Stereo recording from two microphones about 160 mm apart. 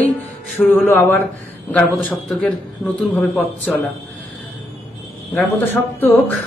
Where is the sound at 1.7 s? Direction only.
Centre (ahead or behind).